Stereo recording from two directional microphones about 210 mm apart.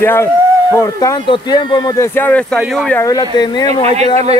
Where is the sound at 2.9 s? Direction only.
20° left (ahead or behind).